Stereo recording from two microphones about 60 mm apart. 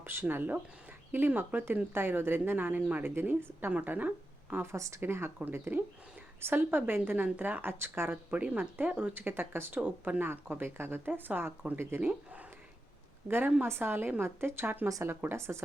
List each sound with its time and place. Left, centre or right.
0.0 s speech: right
3.7 s speech: right
4.6 s speech: right
8.3 s speech: right
9.1 s speech: right
13.2 s speech: right